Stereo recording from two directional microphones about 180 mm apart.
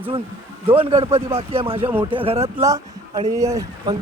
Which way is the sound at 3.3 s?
20° right (ahead or behind).